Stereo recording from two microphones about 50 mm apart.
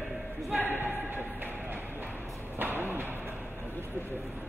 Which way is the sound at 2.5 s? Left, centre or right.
Right.